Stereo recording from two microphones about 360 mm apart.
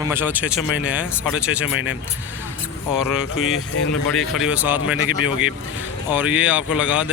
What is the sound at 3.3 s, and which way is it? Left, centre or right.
Speech, left.